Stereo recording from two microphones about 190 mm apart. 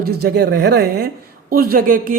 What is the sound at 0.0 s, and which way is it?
Speech, 55° right (ahead or behind).